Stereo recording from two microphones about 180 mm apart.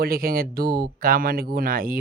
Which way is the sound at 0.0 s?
55° right (ahead or behind).